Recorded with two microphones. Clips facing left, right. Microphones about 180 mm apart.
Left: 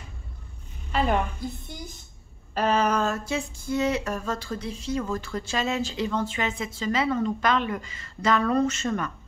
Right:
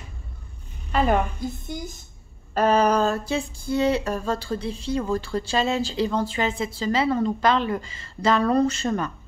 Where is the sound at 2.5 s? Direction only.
45° right (ahead or behind).